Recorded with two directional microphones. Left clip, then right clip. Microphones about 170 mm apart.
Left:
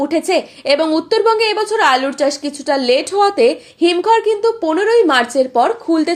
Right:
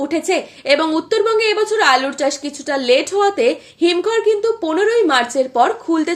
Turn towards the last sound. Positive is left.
turn(degrees=25)  # may be behind; listen again after turning